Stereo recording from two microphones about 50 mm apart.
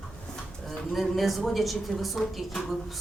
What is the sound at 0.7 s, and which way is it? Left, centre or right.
A woman's voice, centre.